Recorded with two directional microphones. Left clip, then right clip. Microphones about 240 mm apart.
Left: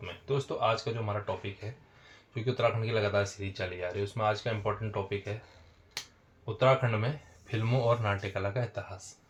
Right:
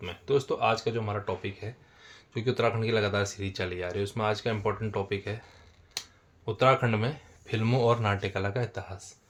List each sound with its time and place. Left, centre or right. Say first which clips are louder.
0.0 s speech: right 6 dB; right
6.4 s speech: right 2 dB; right